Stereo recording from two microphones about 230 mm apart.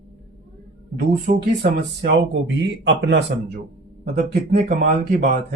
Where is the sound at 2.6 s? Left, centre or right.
Right.